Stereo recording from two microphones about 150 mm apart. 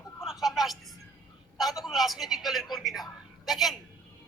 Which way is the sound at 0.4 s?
Centre (ahead or behind).